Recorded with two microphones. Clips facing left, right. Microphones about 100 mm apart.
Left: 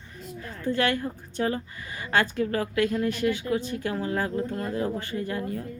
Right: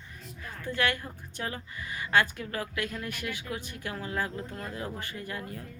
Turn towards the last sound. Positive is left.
turn(degrees=30)  # may be behind; listen again after turning